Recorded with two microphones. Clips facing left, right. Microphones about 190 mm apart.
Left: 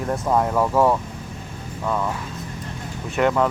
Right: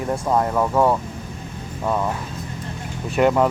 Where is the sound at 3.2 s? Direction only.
15° right (ahead or behind).